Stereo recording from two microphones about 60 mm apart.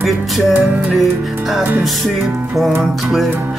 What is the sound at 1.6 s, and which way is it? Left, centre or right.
Music, right.